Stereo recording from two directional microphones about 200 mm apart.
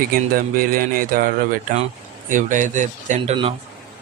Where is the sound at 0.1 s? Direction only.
45° right (ahead or behind).